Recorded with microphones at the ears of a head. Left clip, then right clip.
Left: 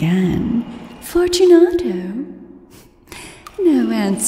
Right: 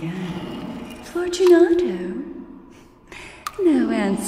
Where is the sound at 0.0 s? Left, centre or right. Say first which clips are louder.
Left 10 dB; left.